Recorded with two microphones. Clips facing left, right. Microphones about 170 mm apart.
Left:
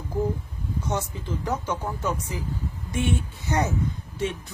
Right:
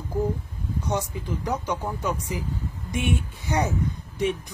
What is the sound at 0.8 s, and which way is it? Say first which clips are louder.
Speech: right 2 dB; 15° right (ahead or behind).